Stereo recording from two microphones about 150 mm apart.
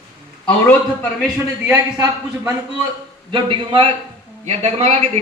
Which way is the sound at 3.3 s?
35° right (ahead or behind).